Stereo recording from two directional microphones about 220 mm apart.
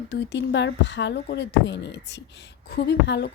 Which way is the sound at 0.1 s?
55° left (ahead or behind).